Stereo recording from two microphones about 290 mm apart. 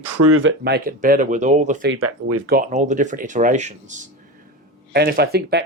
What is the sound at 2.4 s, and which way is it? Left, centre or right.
Speech, right.